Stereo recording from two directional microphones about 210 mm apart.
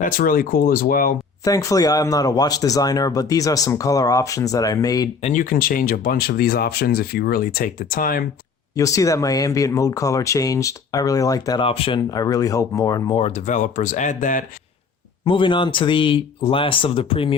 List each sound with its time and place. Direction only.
0.0 s speech: 40° left (ahead or behind)
1.5 s speech: 15° left (ahead or behind)
5.2 s speech: 40° left (ahead or behind)
8.7 s speech: 15° left (ahead or behind); by 14.4 s 40° left (ahead or behind)
15.2 s speech: 25° left (ahead or behind)